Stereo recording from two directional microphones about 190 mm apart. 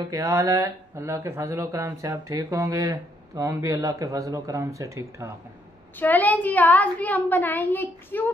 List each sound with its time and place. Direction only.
0.1 s speech: 15° right (ahead or behind)
5.9 s a woman's voice: 10° left (ahead or behind)